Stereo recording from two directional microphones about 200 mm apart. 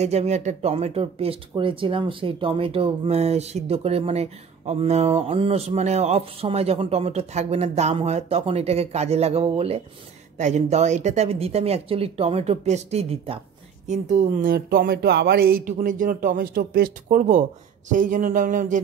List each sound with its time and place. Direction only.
0.0 s speech: 35° right (ahead or behind)